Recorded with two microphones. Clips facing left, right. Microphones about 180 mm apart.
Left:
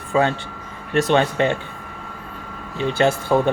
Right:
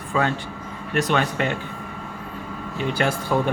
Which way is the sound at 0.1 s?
30° left (ahead or behind).